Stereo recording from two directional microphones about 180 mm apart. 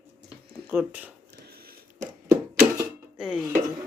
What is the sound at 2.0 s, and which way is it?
Music, 10° right (ahead or behind).